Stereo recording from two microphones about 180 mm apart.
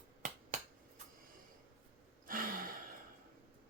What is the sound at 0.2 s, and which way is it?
Finger snapping, 40° right (ahead or behind).